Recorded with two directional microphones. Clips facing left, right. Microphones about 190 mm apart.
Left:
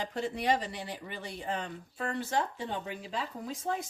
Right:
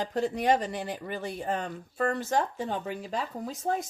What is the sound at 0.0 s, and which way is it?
Speech, 40° right (ahead or behind).